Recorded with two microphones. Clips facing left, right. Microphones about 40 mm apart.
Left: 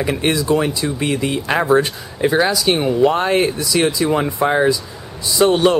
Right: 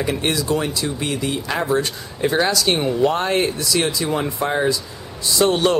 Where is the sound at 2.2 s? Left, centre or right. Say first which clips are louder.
Left 3 dB; centre.